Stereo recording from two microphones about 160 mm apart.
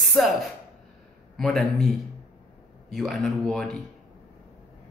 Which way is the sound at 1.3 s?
Centre (ahead or behind).